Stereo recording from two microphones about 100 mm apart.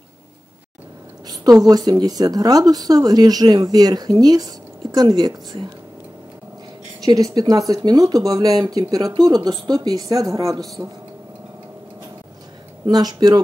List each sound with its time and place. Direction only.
1.2 s a woman's voice: 40° right (ahead or behind)
7.0 s a woman's voice: 40° right (ahead or behind)
12.8 s a woman's voice: 40° right (ahead or behind)